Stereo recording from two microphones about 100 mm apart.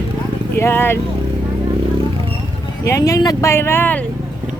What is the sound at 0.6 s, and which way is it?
Speech, 25° left (ahead or behind).